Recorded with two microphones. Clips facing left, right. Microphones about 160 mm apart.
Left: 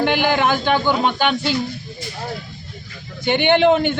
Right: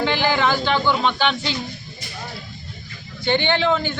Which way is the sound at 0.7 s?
15° left (ahead or behind).